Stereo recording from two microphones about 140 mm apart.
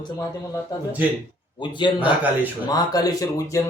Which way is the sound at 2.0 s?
10° right (ahead or behind).